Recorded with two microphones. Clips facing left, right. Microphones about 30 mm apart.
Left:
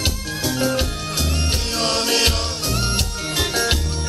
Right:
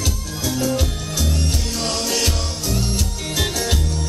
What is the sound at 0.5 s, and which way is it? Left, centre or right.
Music, left.